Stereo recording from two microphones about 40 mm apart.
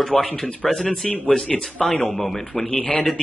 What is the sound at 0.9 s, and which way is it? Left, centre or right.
Speech, left.